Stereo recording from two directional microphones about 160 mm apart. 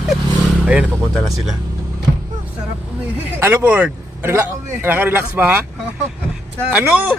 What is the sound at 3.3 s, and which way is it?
Speech, 10° right (ahead or behind).